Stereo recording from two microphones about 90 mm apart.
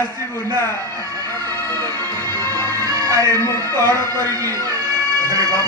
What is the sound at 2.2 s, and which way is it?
Music, 25° left (ahead or behind).